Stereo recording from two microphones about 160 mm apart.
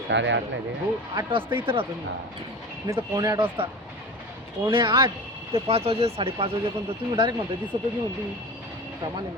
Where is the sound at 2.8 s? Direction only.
20° right (ahead or behind).